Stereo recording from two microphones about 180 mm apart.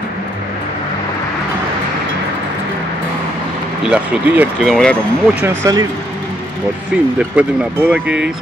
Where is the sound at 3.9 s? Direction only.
10° right (ahead or behind).